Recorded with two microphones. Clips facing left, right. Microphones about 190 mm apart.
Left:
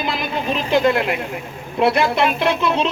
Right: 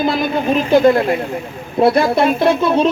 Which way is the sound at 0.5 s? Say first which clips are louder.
Right 5 dB; 40° right (ahead or behind).